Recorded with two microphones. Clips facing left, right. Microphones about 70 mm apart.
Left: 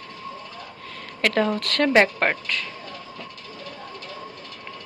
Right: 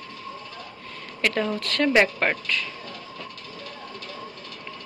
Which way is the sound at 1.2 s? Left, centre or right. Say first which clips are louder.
Left 3 dB; left.